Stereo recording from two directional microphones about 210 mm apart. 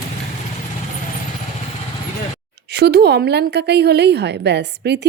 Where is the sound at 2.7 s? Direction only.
50° right (ahead or behind).